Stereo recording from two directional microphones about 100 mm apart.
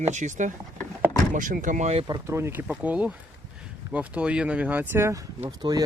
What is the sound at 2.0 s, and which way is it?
Speech, 40° right (ahead or behind).